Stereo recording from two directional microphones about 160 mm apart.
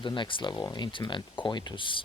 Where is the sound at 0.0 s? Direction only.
30° left (ahead or behind).